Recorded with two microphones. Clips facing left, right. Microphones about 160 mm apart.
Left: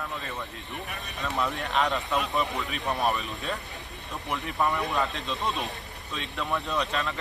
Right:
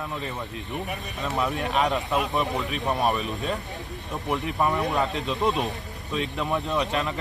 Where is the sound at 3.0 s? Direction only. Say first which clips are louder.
Right 2 dB; centre (ahead or behind).